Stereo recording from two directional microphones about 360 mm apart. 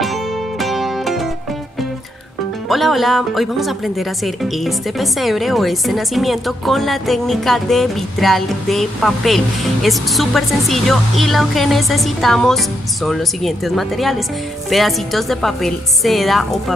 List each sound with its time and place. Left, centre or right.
0.0 s music: centre
2.7 s speech: centre